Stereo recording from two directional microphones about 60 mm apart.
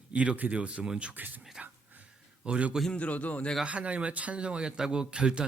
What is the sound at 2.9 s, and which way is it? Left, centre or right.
Speech, left.